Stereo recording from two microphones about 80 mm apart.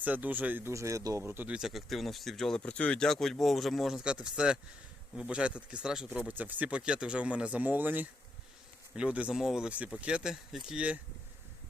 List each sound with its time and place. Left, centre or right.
0.0 s speech: centre
0.7 s speech: right
1.2 s speech: centre
1.5 s speech: centre
2.6 s speech: centre
9.3 s speech: centre
9.6 s speech: centre